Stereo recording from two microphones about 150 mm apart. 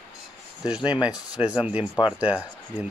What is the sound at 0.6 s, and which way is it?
Speech, 5° right (ahead or behind).